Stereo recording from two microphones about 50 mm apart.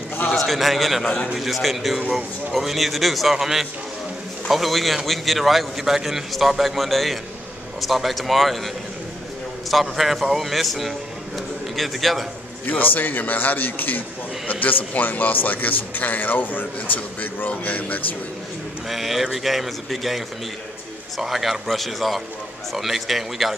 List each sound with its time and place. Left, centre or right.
0.3 s a man's voice: centre
1.0 s a man's voice: centre
1.3 s a man's voice: centre
9.7 s a man's voice: centre
12.6 s a man's voice: left
18.9 s a man's voice: centre